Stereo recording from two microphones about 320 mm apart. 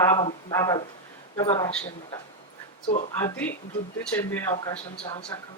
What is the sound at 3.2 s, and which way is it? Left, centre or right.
Speech, centre.